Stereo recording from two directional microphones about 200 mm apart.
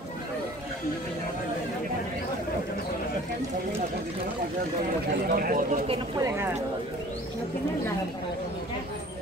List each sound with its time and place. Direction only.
5.3 s speech: 45° right (ahead or behind)
6.2 s speech: 15° right (ahead or behind)